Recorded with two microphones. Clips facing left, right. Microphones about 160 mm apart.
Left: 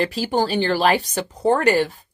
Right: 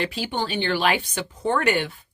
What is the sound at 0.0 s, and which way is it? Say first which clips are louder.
Speech: left 6 dB; 40° left (ahead or behind).